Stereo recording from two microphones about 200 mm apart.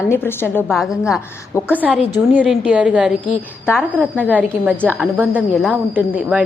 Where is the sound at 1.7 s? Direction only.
5° right (ahead or behind).